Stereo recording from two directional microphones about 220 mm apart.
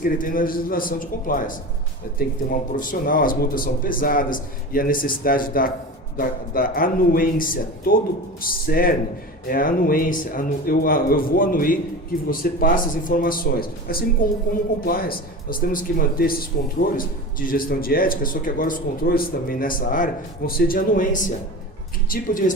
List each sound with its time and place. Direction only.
0.0 s speech: 40° left (ahead or behind)